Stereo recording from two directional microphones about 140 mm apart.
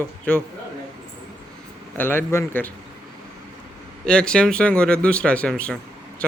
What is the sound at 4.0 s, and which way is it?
Speech, 5° left (ahead or behind).